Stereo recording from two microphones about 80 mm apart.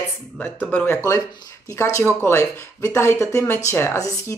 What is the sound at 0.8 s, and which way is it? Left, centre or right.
Speech, left.